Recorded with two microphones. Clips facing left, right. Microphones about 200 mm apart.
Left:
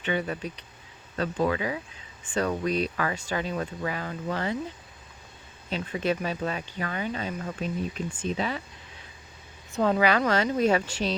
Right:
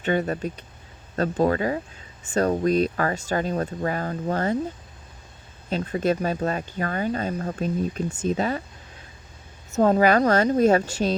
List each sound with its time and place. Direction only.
0.0 s speech: 45° right (ahead or behind)
5.6 s speech: 40° right (ahead or behind)
9.7 s speech: 45° right (ahead or behind)